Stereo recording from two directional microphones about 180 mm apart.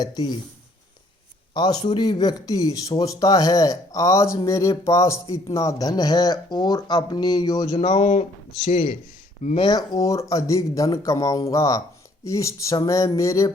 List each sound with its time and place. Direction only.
0.0 s speech: 20° left (ahead or behind)
1.5 s speech: 25° left (ahead or behind)
7.8 s speech: 35° left (ahead or behind)
9.6 s speech: 25° left (ahead or behind)